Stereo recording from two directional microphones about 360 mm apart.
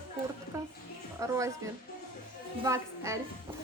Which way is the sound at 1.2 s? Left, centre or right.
Centre.